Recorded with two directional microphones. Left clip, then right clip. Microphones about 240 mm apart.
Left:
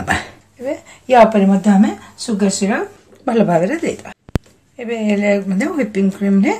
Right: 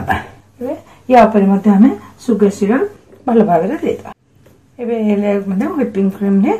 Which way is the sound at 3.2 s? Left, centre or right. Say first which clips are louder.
Right 2 dB; left.